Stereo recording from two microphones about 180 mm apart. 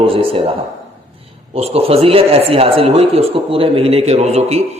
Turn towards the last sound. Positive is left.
turn(degrees=-35)  # may be behind; listen again after turning